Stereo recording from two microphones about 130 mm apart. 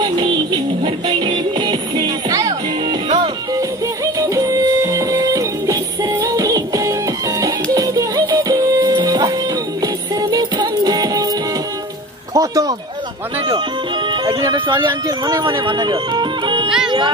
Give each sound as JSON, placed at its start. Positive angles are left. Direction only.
{"t": 0.0, "sound": "music", "side_deg": -35}
{"t": 3.5, "sound": "music", "side_deg": -25}
{"t": 12.4, "sound": "a sound", "side_deg": -25}
{"t": 14.0, "sound": "speech", "side_deg": -35}